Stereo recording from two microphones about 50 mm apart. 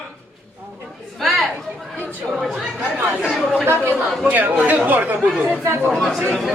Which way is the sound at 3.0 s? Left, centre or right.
Right.